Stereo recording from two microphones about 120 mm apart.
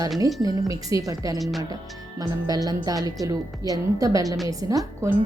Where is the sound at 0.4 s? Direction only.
25° right (ahead or behind).